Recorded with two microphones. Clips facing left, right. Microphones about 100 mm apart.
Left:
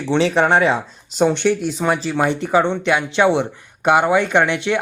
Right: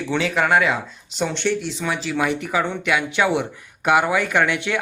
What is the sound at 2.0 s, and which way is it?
Speech, 30° left (ahead or behind).